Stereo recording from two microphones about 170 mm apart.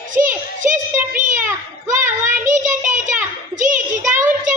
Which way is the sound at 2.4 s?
50° right (ahead or behind).